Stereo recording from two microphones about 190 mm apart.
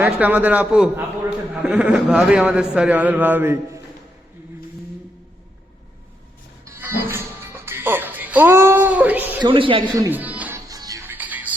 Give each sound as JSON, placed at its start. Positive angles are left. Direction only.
{"t": 0.0, "sound": "a man's voice", "side_deg": -10}
{"t": 6.7, "sound": "music", "side_deg": -10}
{"t": 9.4, "sound": "a man's voice", "side_deg": -25}
{"t": 10.1, "sound": "music", "side_deg": -10}
{"t": 10.7, "sound": "music", "side_deg": -20}